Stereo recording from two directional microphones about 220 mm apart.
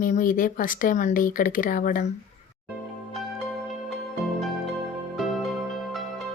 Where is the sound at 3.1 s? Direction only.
Centre (ahead or behind).